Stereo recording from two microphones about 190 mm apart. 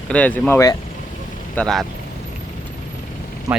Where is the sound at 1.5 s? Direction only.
5° left (ahead or behind).